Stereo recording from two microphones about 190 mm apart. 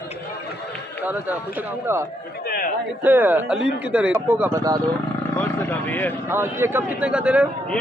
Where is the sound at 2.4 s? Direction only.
55° left (ahead or behind).